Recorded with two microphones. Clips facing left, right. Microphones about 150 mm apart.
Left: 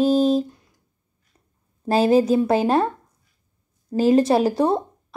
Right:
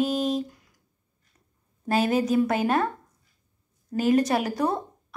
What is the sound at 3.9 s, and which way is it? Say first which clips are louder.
Speech: left 5 dB; 30° left (ahead or behind).